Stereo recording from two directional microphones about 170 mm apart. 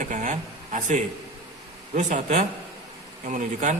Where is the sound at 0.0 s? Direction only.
45° right (ahead or behind).